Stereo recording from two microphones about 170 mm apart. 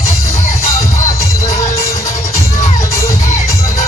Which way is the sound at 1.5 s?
40° left (ahead or behind).